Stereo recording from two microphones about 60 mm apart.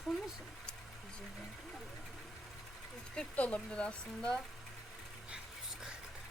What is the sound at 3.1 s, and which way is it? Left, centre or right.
Speech, left.